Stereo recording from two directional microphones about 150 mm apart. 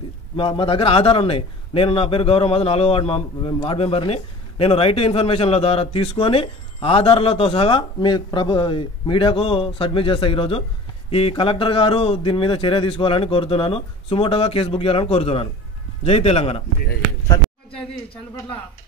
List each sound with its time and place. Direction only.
0.4 s a man's voice: 35° left (ahead or behind)